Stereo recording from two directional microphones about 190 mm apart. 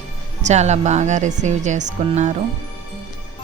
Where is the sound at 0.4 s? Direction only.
35° right (ahead or behind).